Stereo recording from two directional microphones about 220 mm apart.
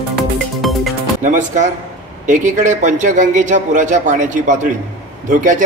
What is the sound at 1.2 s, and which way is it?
A man's voice, 35° right (ahead or behind).